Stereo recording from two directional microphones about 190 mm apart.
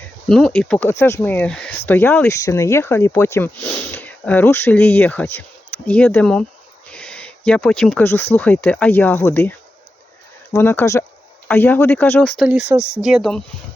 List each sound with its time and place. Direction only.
0.3 s speech: 5° left (ahead or behind)
12.4 s speech: 5° right (ahead or behind)